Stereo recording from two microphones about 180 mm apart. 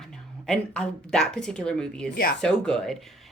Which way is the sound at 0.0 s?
Centre (ahead or behind).